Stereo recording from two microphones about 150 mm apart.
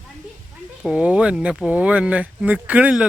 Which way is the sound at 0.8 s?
5° right (ahead or behind).